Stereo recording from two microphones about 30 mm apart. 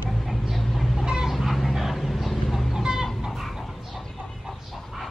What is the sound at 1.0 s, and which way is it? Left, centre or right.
Chicken, right.